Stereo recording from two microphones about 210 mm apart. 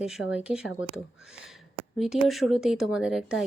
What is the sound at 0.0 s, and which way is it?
A woman's voice, 5° right (ahead or behind).